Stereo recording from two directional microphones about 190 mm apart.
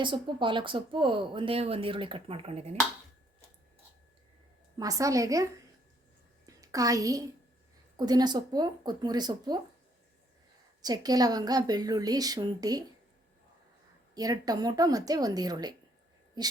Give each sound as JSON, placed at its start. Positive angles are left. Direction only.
{"t": 0.0, "sound": "speech", "side_deg": -25}
{"t": 4.8, "sound": "a woman's voice", "side_deg": -15}
{"t": 6.4, "sound": "a sound", "side_deg": -20}
{"t": 7.9, "sound": "speech", "side_deg": -20}
{"t": 10.8, "sound": "speech", "side_deg": -20}
{"t": 14.2, "sound": "speech", "side_deg": -20}